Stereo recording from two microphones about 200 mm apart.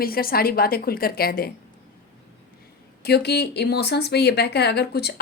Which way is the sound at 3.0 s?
55° left (ahead or behind).